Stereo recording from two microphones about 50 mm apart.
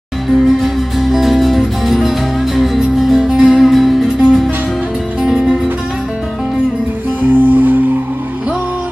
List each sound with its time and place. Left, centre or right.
0.3 s music: centre
7.2 s music: right